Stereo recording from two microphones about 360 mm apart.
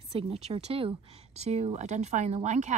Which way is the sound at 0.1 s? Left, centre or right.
Centre.